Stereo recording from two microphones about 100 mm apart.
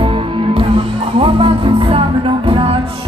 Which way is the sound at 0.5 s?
65° right (ahead or behind).